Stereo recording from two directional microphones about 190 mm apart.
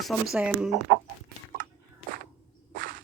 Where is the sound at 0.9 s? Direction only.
35° right (ahead or behind).